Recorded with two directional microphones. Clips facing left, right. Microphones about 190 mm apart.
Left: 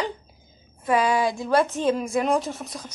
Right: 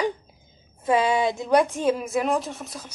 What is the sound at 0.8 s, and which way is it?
A woman's voice, 25° right (ahead or behind).